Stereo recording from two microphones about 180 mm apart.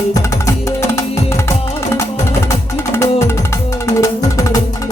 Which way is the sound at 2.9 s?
15° left (ahead or behind).